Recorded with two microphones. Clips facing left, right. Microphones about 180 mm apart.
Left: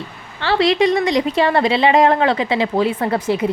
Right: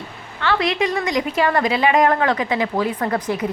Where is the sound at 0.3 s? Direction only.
30° left (ahead or behind).